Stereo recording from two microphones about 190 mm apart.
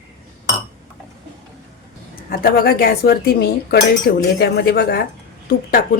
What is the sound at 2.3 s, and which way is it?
A woman's voice, 50° left (ahead or behind).